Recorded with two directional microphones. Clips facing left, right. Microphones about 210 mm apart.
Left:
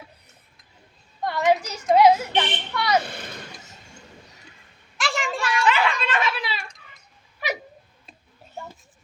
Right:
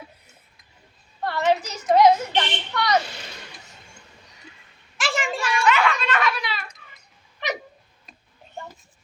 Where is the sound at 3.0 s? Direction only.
55° left (ahead or behind).